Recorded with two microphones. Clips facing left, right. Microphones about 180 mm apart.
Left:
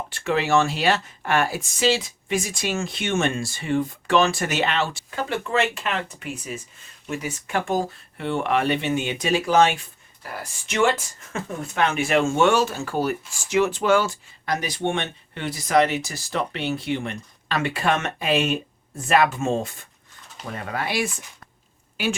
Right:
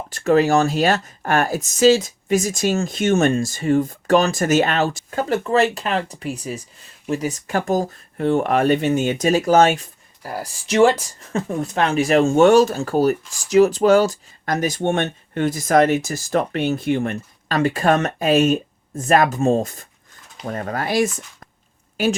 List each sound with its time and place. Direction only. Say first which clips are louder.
0.1 s speech: right 6 dB; 40° right (ahead or behind)